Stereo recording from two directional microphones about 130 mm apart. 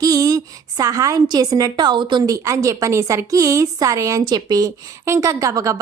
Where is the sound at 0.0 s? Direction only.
25° right (ahead or behind).